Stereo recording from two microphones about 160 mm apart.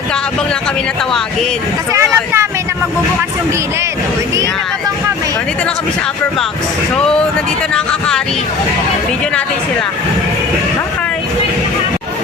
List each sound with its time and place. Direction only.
1.9 s speech: 15° right (ahead or behind)
7.7 s speech: 5° left (ahead or behind)